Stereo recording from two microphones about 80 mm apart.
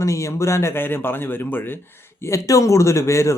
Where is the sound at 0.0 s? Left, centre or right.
Left.